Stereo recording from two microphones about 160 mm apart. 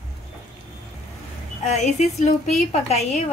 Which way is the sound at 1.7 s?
45° left (ahead or behind).